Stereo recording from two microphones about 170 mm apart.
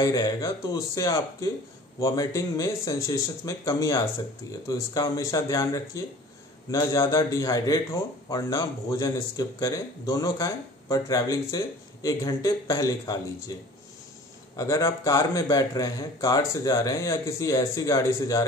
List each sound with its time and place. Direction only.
0.0 s speech: 20° left (ahead or behind)
14.6 s speech: 20° left (ahead or behind)